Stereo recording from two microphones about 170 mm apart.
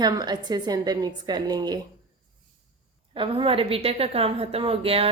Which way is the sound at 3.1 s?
30° right (ahead or behind).